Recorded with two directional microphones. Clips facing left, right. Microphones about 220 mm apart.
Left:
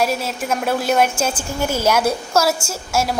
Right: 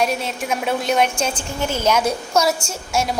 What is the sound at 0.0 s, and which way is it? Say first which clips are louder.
A woman's voice: left 1 dB; 5° left (ahead or behind).